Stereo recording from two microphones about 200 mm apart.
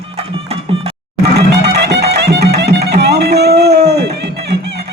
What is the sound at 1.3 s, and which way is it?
Music, 55° right (ahead or behind).